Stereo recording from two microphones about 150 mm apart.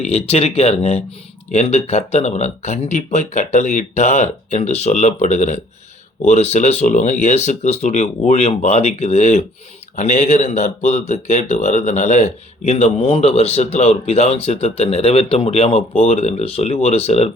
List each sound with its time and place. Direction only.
0.0 s speech: 45° left (ahead or behind)